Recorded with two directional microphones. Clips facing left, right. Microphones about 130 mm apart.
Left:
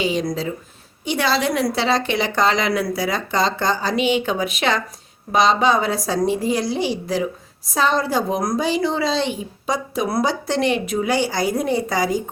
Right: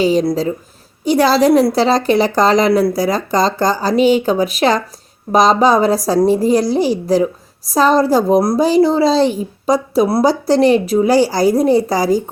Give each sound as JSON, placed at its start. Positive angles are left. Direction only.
{"t": 0.0, "sound": "a woman's voice", "side_deg": -40}